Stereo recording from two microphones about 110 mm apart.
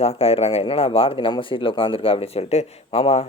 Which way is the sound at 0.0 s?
65° left (ahead or behind).